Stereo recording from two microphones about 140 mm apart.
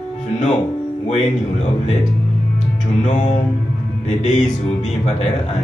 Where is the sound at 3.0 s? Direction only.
60° left (ahead or behind).